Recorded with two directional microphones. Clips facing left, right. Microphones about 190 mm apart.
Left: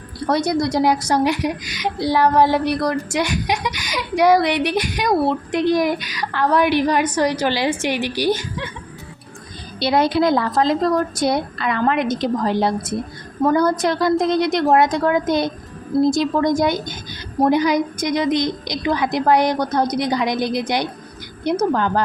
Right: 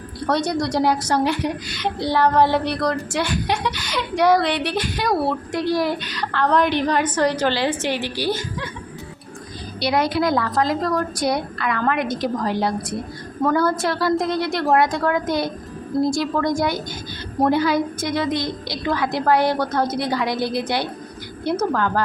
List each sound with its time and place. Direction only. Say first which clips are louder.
0.3 s a woman's voice: left 2 dB; 10° left (ahead or behind)
9.8 s a woman's voice: left 3 dB; 25° left (ahead or behind)